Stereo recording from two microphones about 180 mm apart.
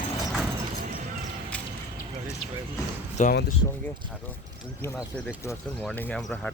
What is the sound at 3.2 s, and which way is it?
Speech, 45° left (ahead or behind).